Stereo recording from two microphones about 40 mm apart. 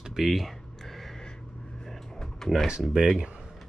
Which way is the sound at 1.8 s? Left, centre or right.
Centre.